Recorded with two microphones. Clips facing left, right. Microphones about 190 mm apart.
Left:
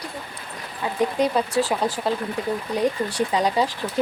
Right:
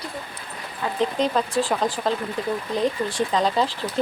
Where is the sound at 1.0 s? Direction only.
10° left (ahead or behind).